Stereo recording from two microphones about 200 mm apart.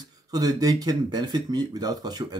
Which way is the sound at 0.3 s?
20° right (ahead or behind).